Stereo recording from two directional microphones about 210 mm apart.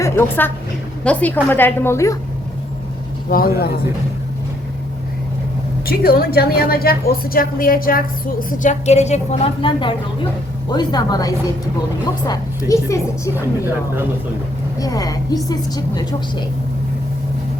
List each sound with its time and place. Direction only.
0.0 s a woman's voice: 10° left (ahead or behind)
3.2 s a woman's voice: 45° left (ahead or behind)
5.8 s a woman's voice: 45° left (ahead or behind); by 13.3 s 15° left (ahead or behind)
14.8 s a woman's voice: 15° left (ahead or behind)